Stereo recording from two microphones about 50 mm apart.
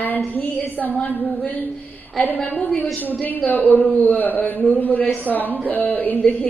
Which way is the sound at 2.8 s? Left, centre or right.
Left.